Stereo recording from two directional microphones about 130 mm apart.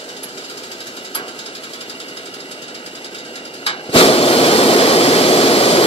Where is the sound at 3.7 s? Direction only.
45° left (ahead or behind).